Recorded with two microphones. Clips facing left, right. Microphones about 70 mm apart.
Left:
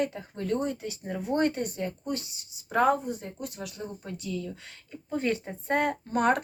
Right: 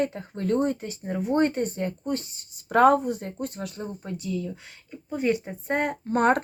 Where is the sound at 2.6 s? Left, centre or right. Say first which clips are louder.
Right 6 dB; right.